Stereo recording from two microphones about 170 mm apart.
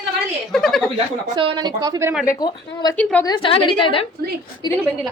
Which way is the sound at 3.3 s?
30° left (ahead or behind).